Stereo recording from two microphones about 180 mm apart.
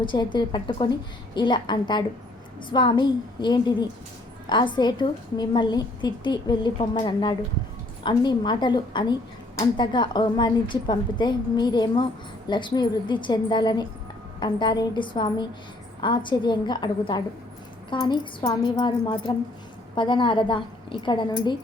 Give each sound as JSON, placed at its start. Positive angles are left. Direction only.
{"t": 0.0, "sound": "a woman's voice", "side_deg": 25}